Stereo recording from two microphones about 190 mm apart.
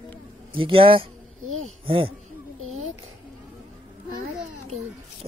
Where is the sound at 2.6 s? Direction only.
90° right.